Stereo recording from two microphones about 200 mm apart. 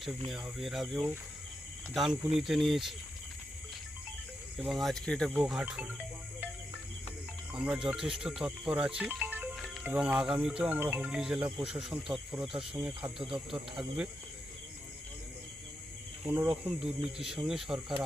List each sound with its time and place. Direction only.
0.3 s speech: centre (ahead or behind)
4.5 s speech: centre (ahead or behind)
7.5 s speech: 5° right (ahead or behind)
16.2 s speech: 10° right (ahead or behind)